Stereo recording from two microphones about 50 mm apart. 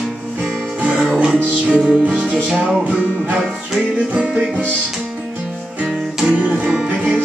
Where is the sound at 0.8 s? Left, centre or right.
Right.